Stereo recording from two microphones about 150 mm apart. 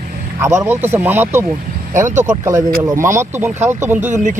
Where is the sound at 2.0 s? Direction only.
55° right (ahead or behind).